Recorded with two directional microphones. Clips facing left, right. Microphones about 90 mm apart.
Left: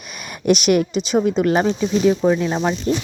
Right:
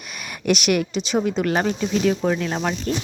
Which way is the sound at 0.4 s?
25° left (ahead or behind).